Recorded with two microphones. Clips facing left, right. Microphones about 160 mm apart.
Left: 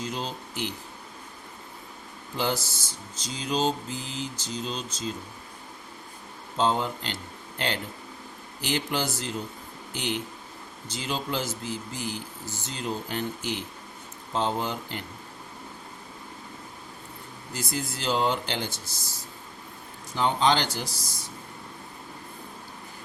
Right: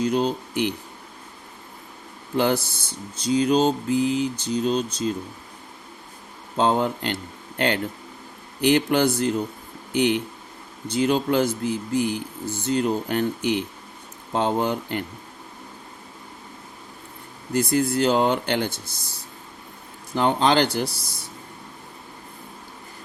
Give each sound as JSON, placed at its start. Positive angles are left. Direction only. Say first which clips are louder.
{"t": 0.0, "sound": "speech", "louder": "right 11 dB", "side_deg": -55}
{"t": 2.3, "sound": "speech", "louder": "right 7 dB", "side_deg": -60}
{"t": 6.6, "sound": "speech", "louder": "right 5 dB", "side_deg": -55}
{"t": 17.5, "sound": "speech", "louder": "right 12 dB", "side_deg": -60}
{"t": 20.1, "sound": "speech", "louder": "right 4 dB", "side_deg": -60}